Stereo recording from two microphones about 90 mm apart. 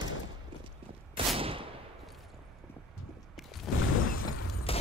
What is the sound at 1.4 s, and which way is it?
Gunshot, 90° right.